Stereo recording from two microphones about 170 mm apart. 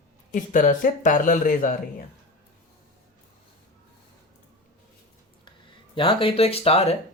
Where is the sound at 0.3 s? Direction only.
50° left (ahead or behind).